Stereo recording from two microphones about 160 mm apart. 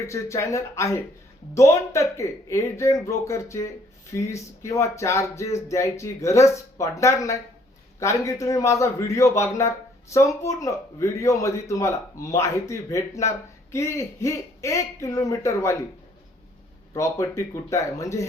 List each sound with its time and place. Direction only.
0.0 s a man's voice: 20° left (ahead or behind)
16.9 s a man's voice: 20° left (ahead or behind)